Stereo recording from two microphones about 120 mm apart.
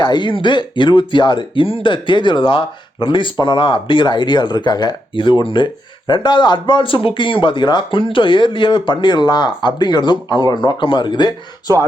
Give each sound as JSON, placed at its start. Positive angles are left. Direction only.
{"t": 0.0, "sound": "speech", "side_deg": 40}